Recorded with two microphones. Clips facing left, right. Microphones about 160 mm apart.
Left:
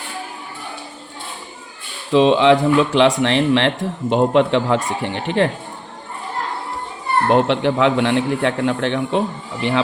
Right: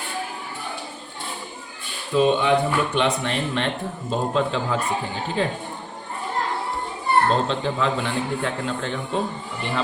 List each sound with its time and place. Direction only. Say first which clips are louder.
2.1 s speech: left 6 dB; 90° left; by 5.5 s 75° left (ahead or behind)
7.3 s a man's voice: left 7 dB; 75° left (ahead or behind); by 9.8 s 90° left